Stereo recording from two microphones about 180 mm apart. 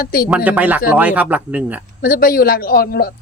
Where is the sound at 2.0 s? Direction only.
50° left (ahead or behind).